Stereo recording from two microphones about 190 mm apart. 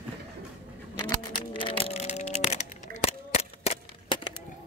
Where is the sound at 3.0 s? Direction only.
35° left (ahead or behind).